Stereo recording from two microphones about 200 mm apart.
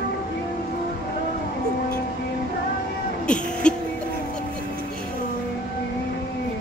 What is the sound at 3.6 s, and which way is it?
Music, 5° left (ahead or behind).